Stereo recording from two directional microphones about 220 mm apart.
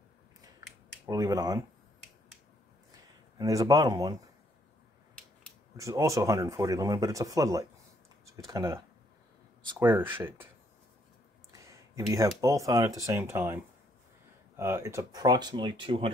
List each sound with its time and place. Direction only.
1.0 s speech: 15° right (ahead or behind)
3.3 s speech: 15° right (ahead or behind)
5.8 s speech: 15° right (ahead or behind)
11.5 s a sound: 15° right (ahead or behind)
12.4 s speech: 15° right (ahead or behind)
14.6 s speech: 10° right (ahead or behind)